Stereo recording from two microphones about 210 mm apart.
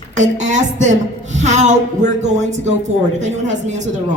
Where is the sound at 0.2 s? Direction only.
35° right (ahead or behind).